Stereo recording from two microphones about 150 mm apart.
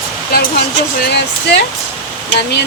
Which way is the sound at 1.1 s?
90° left.